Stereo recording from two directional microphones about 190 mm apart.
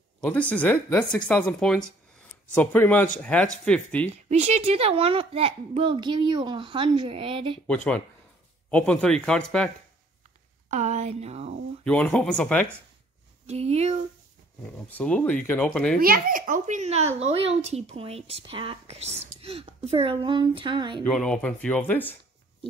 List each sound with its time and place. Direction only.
0.2 s speech: 5° left (ahead or behind)
4.3 s a child's voice: 35° right (ahead or behind)
7.6 s speech: 5° left (ahead or behind)
10.7 s a child's voice: 35° right (ahead or behind)
11.8 s speech: 5° left (ahead or behind)
13.5 s a child's voice: 35° right (ahead or behind)
14.9 s speech: 10° left (ahead or behind)
16.0 s a child's voice: 50° right (ahead or behind); by 21.0 s 25° right (ahead or behind)
21.0 s speech: 5° left (ahead or behind)